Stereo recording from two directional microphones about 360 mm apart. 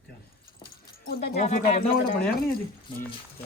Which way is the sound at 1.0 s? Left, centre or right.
Left.